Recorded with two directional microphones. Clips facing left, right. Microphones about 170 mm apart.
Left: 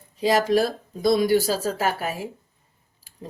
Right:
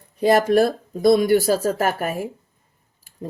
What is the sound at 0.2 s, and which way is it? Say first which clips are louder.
Speech: right 4 dB; 55° right (ahead or behind).